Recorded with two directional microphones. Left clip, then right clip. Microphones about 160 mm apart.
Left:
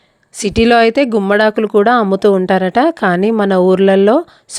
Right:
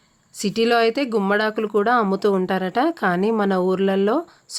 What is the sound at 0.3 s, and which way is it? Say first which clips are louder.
Speech: left 8 dB; 45° left (ahead or behind).